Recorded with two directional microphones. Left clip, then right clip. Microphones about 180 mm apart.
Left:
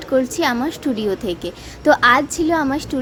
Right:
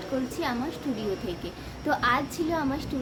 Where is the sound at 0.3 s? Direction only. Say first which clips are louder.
Left 11 dB; 50° left (ahead or behind).